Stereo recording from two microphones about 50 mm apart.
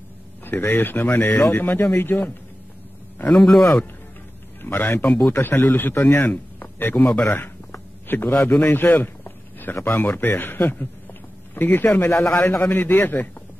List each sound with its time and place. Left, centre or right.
0.4 s speech: left
4.6 s a man's voice: left
8.5 s a sound: left
9.8 s speech: left
12.1 s a man's voice: left
12.6 s speech: left